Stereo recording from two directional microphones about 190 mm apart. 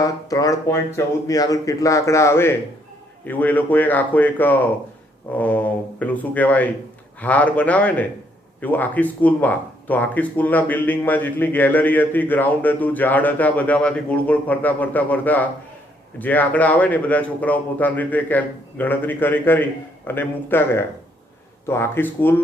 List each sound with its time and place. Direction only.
0.0 s speech: 20° left (ahead or behind)